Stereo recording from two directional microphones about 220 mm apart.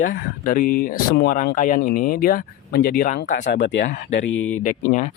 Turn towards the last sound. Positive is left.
turn(degrees=35)  # may be behind; listen again after turning